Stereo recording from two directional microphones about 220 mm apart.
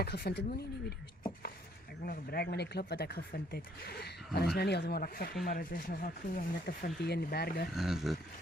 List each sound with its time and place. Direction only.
0.0 s speech: 45° left (ahead or behind)
2.0 s speech: 45° left (ahead or behind)
7.7 s speech: centre (ahead or behind)